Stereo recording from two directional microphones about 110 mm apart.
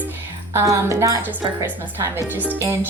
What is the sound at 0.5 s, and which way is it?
Speech, 25° right (ahead or behind).